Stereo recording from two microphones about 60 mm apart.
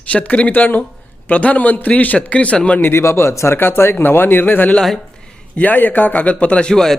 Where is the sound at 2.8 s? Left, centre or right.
Left.